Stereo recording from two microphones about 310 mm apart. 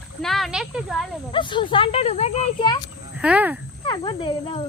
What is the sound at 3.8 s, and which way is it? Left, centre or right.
Speech, centre.